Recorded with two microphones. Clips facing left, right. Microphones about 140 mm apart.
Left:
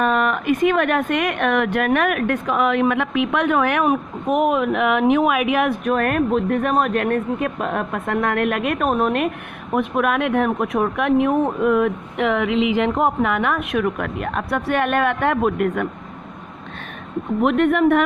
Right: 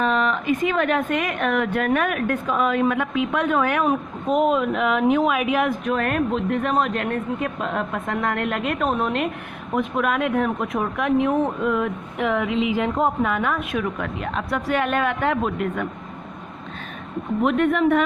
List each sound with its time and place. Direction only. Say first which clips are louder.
0.0 s speech: left 2 dB; 60° left (ahead or behind)
17.4 s speech: left 3 dB; 60° left (ahead or behind)